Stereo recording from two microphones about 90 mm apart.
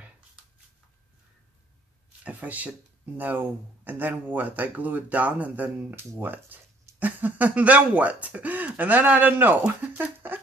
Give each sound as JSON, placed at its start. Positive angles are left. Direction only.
{"t": 2.2, "sound": "speech", "side_deg": -15}